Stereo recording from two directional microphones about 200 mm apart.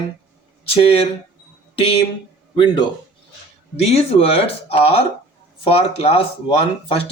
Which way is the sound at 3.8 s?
30° left (ahead or behind).